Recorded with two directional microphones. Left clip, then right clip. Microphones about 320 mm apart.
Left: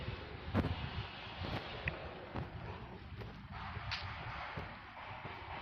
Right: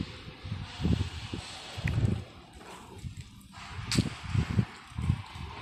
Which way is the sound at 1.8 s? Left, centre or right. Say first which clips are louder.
Right 5 dB; right.